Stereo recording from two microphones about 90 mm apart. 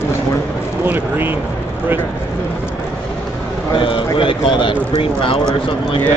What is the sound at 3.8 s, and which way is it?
Speech, 75° left (ahead or behind).